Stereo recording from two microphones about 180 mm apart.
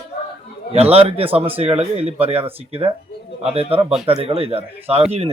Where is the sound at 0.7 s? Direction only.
35° right (ahead or behind).